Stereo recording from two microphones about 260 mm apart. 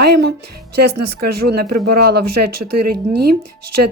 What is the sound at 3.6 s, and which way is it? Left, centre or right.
Speech, right.